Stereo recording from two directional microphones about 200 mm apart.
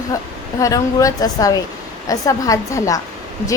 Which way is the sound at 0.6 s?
15° left (ahead or behind).